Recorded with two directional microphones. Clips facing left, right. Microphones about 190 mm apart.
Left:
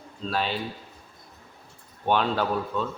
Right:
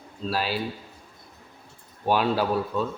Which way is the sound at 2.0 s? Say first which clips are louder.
Right 1 dB; 5° right (ahead or behind).